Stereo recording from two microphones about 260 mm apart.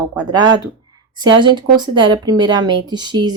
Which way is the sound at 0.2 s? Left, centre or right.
Centre.